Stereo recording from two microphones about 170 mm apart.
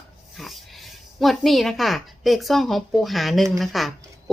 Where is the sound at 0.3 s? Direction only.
Centre (ahead or behind).